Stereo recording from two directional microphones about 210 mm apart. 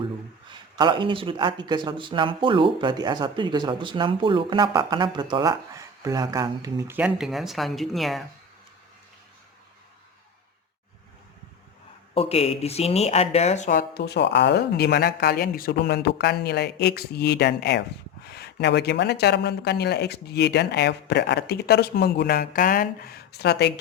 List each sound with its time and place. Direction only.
0.8 s speech: 20° right (ahead or behind); by 8.2 s centre (ahead or behind)
12.1 s speech: 25° left (ahead or behind); by 23.7 s 50° left (ahead or behind)